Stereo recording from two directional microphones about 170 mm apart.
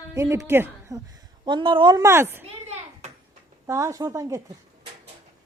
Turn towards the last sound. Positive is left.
turn(degrees=-20)  # may be behind; listen again after turning